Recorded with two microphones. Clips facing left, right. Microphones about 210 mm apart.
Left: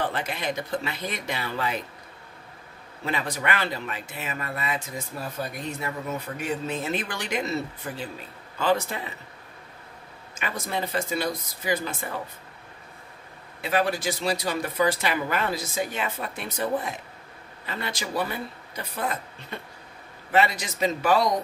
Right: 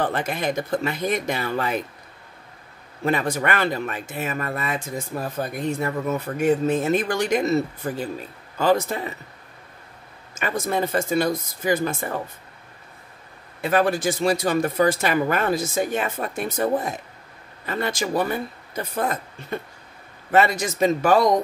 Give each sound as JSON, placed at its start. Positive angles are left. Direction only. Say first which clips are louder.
{"t": 0.0, "sound": "speech", "louder": "right 5 dB", "side_deg": -45}
{"t": 3.0, "sound": "speech", "louder": "right 7 dB", "side_deg": -50}
{"t": 10.3, "sound": "speech", "louder": "right 6 dB", "side_deg": -45}
{"t": 13.6, "sound": "speech", "louder": "right 5 dB", "side_deg": -50}